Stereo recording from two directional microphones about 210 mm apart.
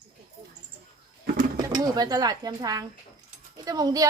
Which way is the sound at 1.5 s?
20° right (ahead or behind).